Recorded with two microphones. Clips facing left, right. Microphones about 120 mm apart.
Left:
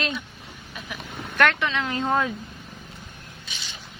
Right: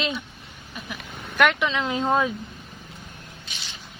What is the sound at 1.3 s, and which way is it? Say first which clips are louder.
Speech: right 1 dB; 15° right (ahead or behind).